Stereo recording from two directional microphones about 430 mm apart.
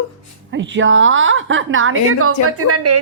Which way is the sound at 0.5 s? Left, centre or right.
Right.